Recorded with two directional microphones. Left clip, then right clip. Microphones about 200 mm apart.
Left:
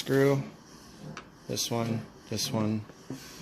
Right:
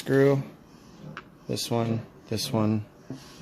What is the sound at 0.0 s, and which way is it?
Speech, 20° right (ahead or behind).